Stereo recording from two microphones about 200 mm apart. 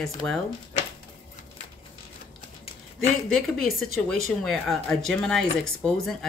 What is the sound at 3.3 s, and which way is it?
Speech, centre (ahead or behind).